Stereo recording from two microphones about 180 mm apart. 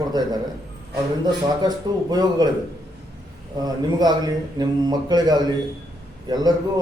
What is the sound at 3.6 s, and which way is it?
Speech, 20° right (ahead or behind).